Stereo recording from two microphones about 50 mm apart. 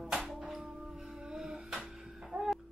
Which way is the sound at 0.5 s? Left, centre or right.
Centre.